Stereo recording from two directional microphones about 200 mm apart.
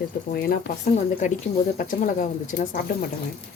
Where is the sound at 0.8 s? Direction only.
35° left (ahead or behind).